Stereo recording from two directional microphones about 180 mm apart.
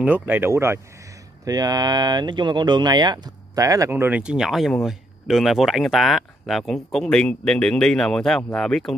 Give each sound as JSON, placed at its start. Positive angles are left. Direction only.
{"t": 0.0, "sound": "speech", "side_deg": -10}